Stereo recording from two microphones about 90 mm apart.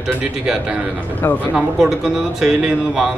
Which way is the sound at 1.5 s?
5° right (ahead or behind).